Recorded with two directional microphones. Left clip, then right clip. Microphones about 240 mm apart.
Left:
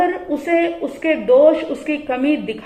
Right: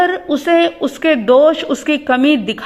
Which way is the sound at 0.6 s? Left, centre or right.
Right.